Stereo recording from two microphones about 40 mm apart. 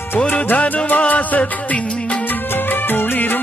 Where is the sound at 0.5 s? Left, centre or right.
Left.